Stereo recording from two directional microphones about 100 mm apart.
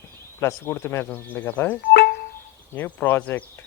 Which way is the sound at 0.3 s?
25° left (ahead or behind).